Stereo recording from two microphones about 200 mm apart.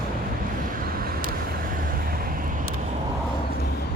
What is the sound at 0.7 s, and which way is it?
Vehicle, 45° right (ahead or behind).